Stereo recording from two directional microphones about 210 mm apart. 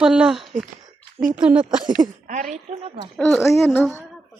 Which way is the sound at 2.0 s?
20° right (ahead or behind).